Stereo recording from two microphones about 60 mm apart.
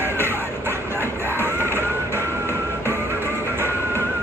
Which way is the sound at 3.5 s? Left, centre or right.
Right.